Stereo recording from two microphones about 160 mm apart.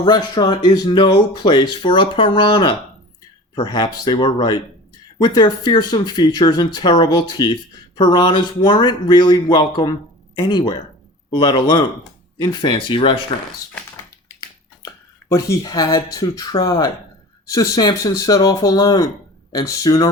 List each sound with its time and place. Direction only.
0.0 s speech: 25° left (ahead or behind)
15.3 s speech: 20° left (ahead or behind)